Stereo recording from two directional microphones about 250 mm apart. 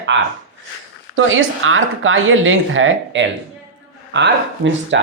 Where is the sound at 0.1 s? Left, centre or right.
Right.